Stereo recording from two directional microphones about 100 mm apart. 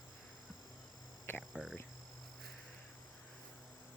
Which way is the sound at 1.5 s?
5° right (ahead or behind).